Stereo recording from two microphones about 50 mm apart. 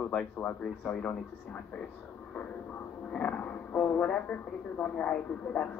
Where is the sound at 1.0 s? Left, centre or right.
Left.